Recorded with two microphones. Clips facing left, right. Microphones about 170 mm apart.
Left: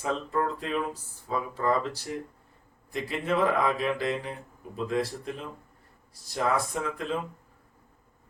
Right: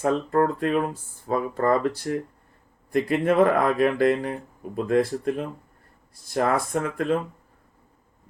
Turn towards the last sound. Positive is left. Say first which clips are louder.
# right 7 dB
turn(degrees=-55)  # may be behind; listen again after turning